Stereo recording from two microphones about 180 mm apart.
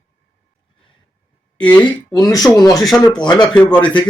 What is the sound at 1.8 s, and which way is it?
Speech, 20° left (ahead or behind).